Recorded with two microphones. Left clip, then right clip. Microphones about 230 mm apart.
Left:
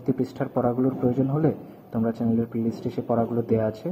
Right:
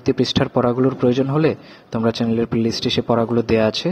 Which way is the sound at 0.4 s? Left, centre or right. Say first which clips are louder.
Right 7 dB; right.